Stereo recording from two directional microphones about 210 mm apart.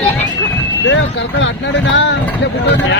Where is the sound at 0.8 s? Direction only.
60° left (ahead or behind).